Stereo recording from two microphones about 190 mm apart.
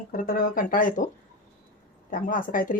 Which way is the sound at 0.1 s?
50° left (ahead or behind).